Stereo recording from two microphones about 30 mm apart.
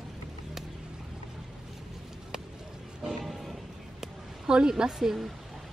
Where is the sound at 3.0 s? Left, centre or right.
Centre.